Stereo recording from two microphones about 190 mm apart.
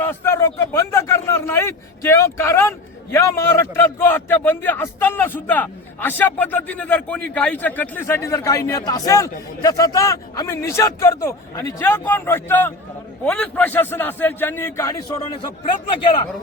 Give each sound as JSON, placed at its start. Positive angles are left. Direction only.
{"t": 0.0, "sound": "a man's voice", "side_deg": 10}
{"t": 15.9, "sound": "speech", "side_deg": 25}